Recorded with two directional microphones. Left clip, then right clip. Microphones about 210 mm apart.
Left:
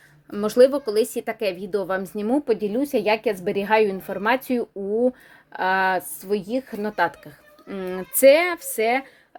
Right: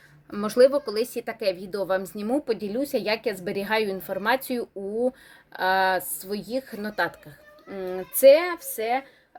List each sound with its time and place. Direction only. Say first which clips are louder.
0.3 s a woman's voice: left 2 dB; 20° left (ahead or behind); by 9.0 s 45° left (ahead or behind)